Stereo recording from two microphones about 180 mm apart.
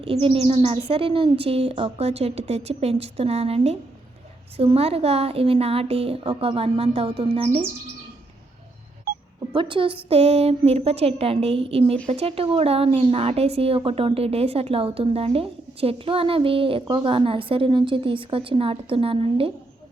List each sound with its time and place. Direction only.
0.0 s a woman's voice: 30° right (ahead or behind)
9.6 s a woman's voice: 30° right (ahead or behind)